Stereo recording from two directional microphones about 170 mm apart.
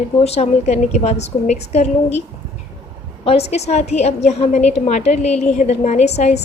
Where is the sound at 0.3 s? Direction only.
40° left (ahead or behind).